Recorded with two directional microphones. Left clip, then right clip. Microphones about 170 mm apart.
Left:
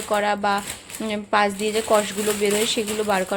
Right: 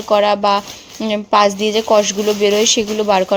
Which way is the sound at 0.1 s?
40° right (ahead or behind).